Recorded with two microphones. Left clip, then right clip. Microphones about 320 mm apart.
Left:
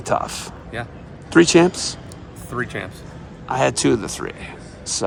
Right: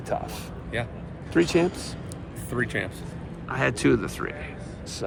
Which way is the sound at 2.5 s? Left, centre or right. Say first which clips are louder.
Left 2 dB; centre.